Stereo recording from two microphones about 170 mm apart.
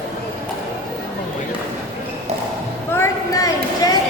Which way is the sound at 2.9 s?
15° left (ahead or behind).